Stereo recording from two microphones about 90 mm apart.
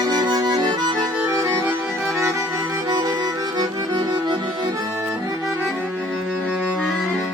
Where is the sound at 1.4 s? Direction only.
30° right (ahead or behind).